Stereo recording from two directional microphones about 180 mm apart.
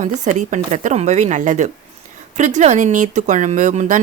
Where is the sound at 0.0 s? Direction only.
45° right (ahead or behind).